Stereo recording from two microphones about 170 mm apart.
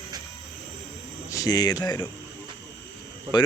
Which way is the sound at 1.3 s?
20° left (ahead or behind).